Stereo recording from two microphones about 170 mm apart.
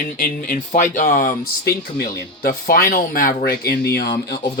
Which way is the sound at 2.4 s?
60° left (ahead or behind).